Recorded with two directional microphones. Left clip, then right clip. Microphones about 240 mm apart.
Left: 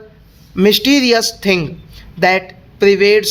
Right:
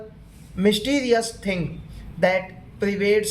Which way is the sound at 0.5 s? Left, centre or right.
Left.